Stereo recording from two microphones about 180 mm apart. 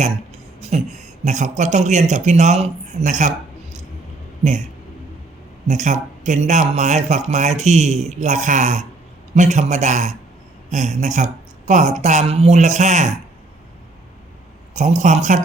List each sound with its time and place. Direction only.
0.6 s speech: 40° right (ahead or behind)
5.6 s speech: 40° right (ahead or behind)
14.7 s speech: 40° right (ahead or behind)